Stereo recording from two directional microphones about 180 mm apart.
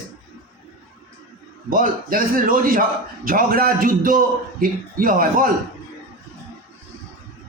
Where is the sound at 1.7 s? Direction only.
50° right (ahead or behind).